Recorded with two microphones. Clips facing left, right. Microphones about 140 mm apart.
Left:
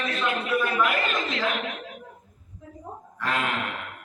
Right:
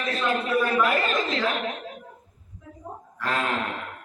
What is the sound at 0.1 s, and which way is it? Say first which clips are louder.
Speech: right 4 dB; 35° right (ahead or behind).